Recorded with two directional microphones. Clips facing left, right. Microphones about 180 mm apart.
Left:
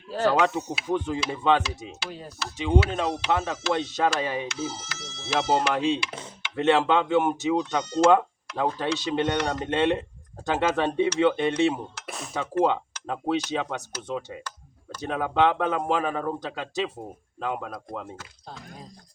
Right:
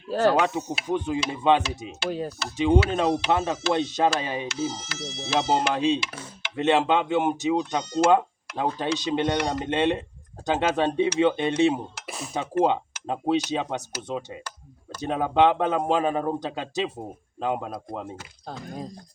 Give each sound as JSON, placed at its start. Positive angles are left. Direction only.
{"t": 0.3, "sound": "speech", "side_deg": -15}
{"t": 2.0, "sound": "speech", "side_deg": -50}
{"t": 2.6, "sound": "speech", "side_deg": -20}
{"t": 12.0, "sound": "speech", "side_deg": 0}
{"t": 12.3, "sound": "speech", "side_deg": -20}